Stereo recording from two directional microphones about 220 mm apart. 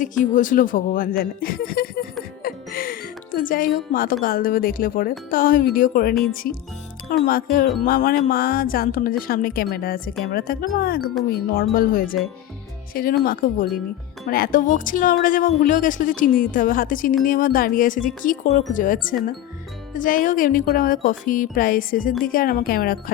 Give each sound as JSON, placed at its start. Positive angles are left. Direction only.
{"t": 0.0, "sound": "a woman's voice", "side_deg": 35}
{"t": 7.3, "sound": "a woman's voice", "side_deg": 40}